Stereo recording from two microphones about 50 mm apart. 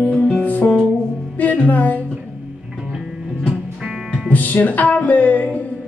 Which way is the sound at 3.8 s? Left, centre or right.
Centre.